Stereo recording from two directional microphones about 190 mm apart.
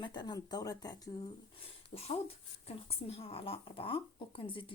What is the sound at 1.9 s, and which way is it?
Speech, 30° left (ahead or behind).